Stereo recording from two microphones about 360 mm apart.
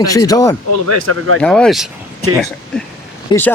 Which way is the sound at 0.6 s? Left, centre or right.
Right.